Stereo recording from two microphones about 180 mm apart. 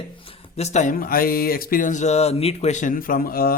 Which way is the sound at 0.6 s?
40° left (ahead or behind).